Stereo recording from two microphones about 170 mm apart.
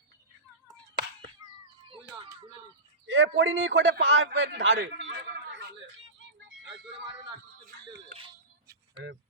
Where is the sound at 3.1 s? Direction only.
90° right.